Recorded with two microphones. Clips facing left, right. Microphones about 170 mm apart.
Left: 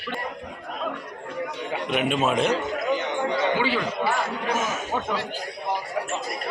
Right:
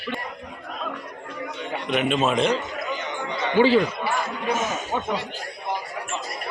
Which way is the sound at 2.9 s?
60° left (ahead or behind).